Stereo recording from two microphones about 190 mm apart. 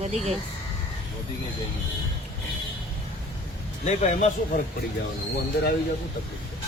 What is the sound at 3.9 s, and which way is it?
Speech, 35° left (ahead or behind).